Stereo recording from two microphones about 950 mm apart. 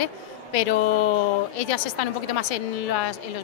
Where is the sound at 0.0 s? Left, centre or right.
Left.